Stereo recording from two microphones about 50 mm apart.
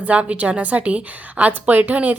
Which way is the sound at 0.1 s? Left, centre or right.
Right.